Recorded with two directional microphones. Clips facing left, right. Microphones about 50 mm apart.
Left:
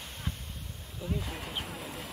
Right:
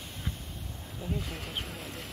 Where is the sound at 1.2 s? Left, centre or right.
Centre.